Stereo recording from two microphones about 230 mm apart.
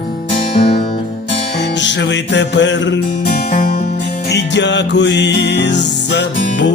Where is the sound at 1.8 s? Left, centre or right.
Left.